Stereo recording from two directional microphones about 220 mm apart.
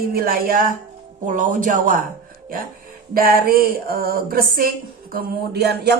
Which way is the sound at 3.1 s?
40° right (ahead or behind).